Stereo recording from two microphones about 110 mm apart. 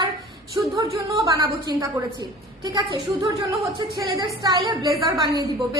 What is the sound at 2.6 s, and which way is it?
A woman's voice, 35° right (ahead or behind).